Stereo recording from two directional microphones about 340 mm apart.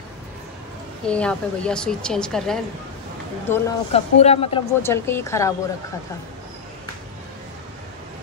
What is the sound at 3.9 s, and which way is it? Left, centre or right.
Speech, centre.